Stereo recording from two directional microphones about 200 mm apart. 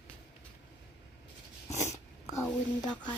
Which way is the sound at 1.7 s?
15° left (ahead or behind).